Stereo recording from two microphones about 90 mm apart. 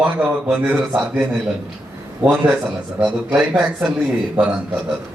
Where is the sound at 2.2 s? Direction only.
15° right (ahead or behind).